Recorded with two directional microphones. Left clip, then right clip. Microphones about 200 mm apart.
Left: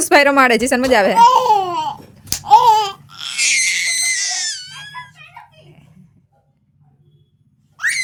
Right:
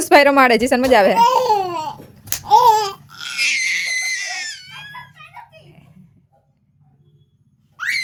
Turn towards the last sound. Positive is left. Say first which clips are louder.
# left 3 dB
turn(degrees=15)  # may be behind; listen again after turning